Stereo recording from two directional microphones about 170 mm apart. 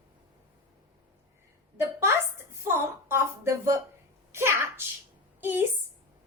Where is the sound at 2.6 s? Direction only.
15° right (ahead or behind).